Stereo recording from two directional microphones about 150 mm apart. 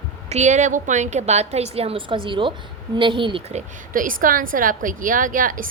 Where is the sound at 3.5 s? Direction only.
65° right (ahead or behind).